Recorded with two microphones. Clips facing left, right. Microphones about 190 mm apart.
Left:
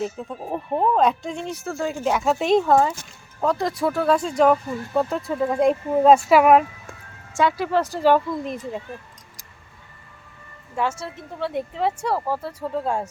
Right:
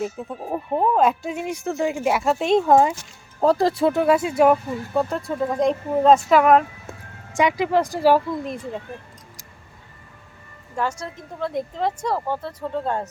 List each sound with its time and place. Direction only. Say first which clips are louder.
0.0 s speech: even; 5° right (ahead or behind)
2.6 s speech: right 2 dB; 15° right (ahead or behind)
3.4 s speech: right 4 dB; 30° right (ahead or behind)
4.0 s speech: even; 10° right (ahead or behind)
7.3 s speech: right 1 dB; 15° right (ahead or behind)
10.8 s speech: left 1 dB; 5° left (ahead or behind)